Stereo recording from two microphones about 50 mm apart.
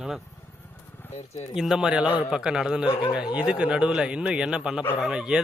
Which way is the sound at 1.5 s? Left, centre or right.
Centre.